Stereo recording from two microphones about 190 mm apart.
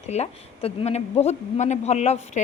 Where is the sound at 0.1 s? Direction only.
35° left (ahead or behind).